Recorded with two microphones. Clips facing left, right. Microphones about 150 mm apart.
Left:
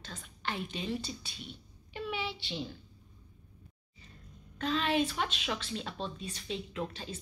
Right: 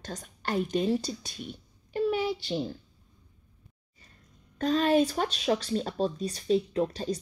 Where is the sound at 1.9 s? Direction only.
40° right (ahead or behind).